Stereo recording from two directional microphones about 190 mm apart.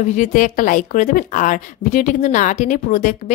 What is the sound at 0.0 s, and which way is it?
A woman's voice, 40° left (ahead or behind).